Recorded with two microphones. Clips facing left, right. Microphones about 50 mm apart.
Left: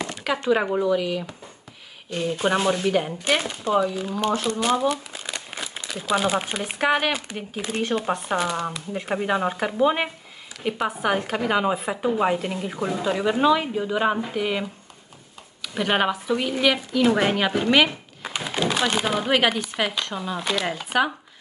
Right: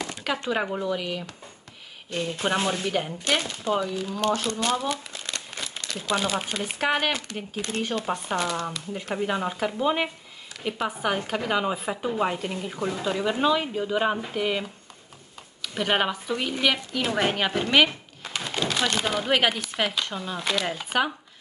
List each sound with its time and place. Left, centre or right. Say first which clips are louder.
0.5 s a woman's voice: left 7 dB; centre
0.8 s speech: left 6 dB; centre
2.0 s a woman's voice: left 4 dB; centre
2.9 s a woman's voice: left 4 dB; centre
4.5 s crumpling: left 4 dB; centre
6.5 s a woman's voice: left 3 dB; centre